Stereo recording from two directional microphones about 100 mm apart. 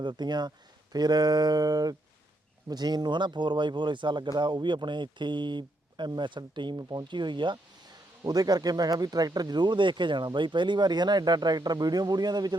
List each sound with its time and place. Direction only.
0.0 s speech: 50° right (ahead or behind)
8.2 s speech: 40° right (ahead or behind)